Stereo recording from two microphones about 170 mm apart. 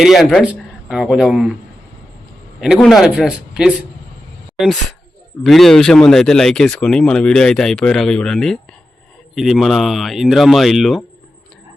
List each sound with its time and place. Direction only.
0.0 s speech: centre (ahead or behind)
2.7 s speech: centre (ahead or behind)